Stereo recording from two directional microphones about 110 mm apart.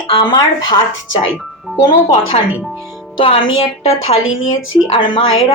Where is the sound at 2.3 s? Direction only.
75° left (ahead or behind).